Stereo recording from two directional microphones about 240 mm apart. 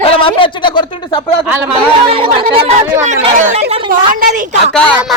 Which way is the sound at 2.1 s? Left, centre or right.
Right.